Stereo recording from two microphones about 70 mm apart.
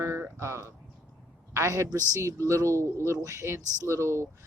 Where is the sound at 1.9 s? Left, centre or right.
Right.